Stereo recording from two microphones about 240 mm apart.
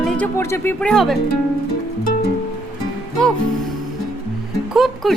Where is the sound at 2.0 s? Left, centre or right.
Left.